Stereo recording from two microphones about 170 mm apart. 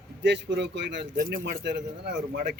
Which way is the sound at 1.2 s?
55° right (ahead or behind).